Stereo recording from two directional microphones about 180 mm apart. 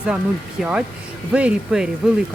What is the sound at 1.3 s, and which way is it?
Speech, 5° right (ahead or behind).